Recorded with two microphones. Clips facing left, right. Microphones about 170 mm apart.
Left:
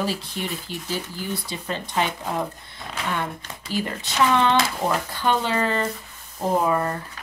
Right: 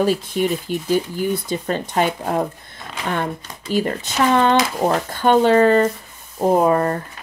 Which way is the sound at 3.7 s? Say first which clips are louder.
Right 7 dB; 45° right (ahead or behind).